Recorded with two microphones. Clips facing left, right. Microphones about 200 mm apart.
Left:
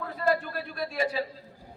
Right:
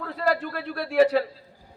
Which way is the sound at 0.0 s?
75° right (ahead or behind).